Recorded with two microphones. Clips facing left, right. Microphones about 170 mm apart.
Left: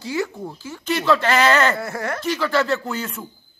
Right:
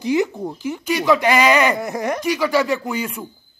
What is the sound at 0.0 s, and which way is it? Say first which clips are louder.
A man's voice: right 6 dB; 20° right (ahead or behind).